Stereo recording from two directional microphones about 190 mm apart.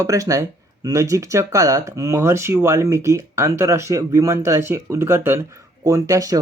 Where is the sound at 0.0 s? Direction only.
15° right (ahead or behind).